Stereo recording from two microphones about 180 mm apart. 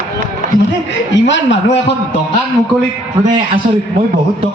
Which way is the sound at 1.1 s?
90° left.